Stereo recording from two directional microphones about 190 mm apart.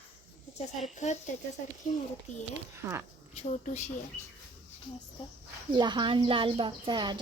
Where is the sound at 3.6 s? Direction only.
35° left (ahead or behind).